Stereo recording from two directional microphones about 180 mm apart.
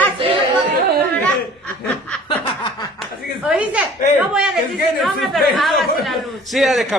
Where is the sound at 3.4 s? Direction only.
10° right (ahead or behind).